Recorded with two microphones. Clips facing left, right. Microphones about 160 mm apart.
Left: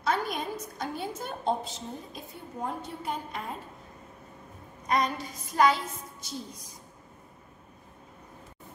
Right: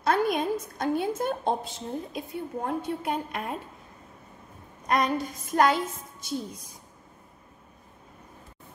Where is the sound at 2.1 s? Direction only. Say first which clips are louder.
Right 6 dB; 65° right (ahead or behind).